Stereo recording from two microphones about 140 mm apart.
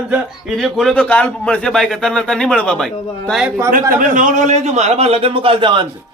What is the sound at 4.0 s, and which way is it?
A man's voice, 70° right (ahead or behind).